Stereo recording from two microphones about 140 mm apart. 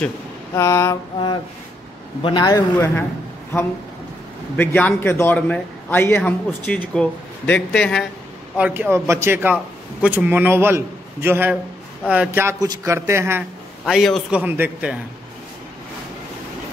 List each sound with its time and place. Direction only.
0.6 s a man's voice: 20° left (ahead or behind)
2.2 s a man's voice: 30° left (ahead or behind)
4.6 s a man's voice: 15° left (ahead or behind)
8.5 s a man's voice: 10° right (ahead or behind)
13.4 s a man's voice: 5° right (ahead or behind)